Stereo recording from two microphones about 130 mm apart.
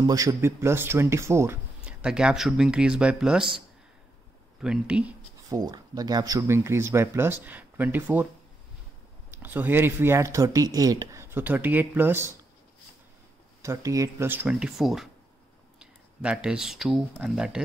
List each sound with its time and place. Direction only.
0.0 s speech: 25° right (ahead or behind)
1.9 s speech: 10° right (ahead or behind)
4.6 s speech: 5° right (ahead or behind)
5.5 s speech: 30° right (ahead or behind); by 8.3 s 15° right (ahead or behind)
9.4 s speech: 15° right (ahead or behind)
13.6 s speech: 25° right (ahead or behind); by 17.6 s 5° right (ahead or behind)